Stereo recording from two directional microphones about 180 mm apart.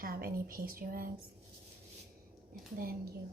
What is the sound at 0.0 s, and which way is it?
Speech, 55° right (ahead or behind).